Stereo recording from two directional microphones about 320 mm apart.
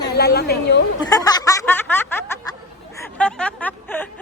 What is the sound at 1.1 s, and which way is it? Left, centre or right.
Speech, centre.